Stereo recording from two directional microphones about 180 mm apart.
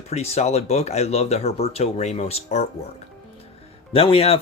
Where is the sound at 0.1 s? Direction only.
35° left (ahead or behind).